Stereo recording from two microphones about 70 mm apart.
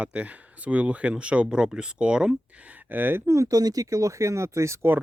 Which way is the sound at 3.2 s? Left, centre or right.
Right.